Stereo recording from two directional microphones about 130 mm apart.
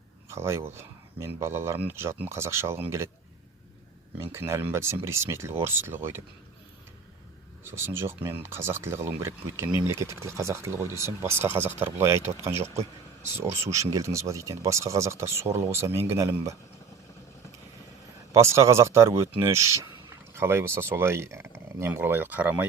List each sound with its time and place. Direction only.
0.3 s speech: 20° right (ahead or behind)
4.2 s speech: 20° right (ahead or behind)
7.7 s speech: 20° right (ahead or behind)
18.3 s speech: 20° right (ahead or behind)